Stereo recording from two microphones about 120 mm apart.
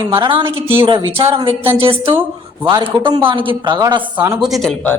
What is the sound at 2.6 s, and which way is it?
A woman's voice, 40° right (ahead or behind).